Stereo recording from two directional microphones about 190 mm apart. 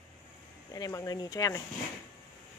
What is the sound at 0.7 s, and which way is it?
Speech, 15° left (ahead or behind).